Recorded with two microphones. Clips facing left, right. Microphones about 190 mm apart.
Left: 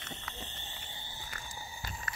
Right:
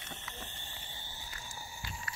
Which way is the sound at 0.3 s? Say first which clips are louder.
Left 2 dB; 20° left (ahead or behind).